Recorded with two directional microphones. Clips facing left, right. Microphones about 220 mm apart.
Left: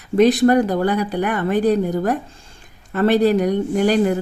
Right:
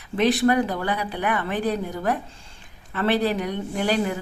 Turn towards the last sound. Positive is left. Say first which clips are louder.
# left 7 dB
turn(degrees=45)  # may be behind; listen again after turning